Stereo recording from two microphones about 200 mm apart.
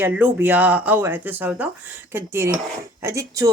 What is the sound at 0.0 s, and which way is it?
Speech, 10° right (ahead or behind).